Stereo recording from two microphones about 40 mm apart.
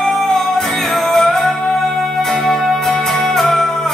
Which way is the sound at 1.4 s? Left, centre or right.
Centre.